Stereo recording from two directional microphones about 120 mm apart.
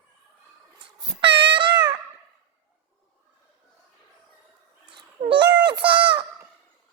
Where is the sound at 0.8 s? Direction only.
45° right (ahead or behind).